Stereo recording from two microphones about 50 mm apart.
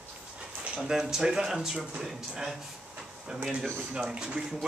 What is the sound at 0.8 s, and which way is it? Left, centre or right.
Speech, centre.